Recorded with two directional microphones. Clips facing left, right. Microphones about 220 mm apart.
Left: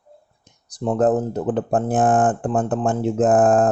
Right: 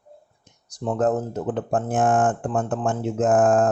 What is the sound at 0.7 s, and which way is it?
Speech, 35° left (ahead or behind).